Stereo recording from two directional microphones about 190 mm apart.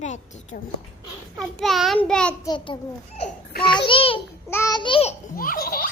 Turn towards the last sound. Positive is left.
turn(degrees=50)  # may be behind; listen again after turning